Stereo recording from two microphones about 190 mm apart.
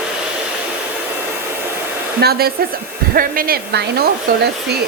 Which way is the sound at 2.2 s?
55° right (ahead or behind).